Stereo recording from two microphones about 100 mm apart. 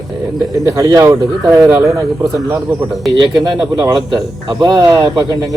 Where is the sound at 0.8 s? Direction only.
35° right (ahead or behind).